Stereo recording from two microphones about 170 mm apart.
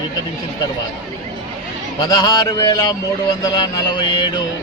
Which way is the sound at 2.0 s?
25° left (ahead or behind).